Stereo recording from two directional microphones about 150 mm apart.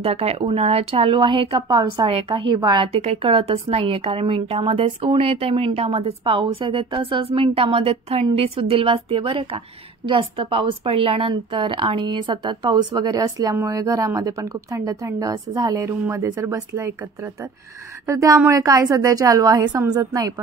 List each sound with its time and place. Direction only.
0.0 s a woman's voice: 40° right (ahead or behind); by 20.3 s 25° right (ahead or behind)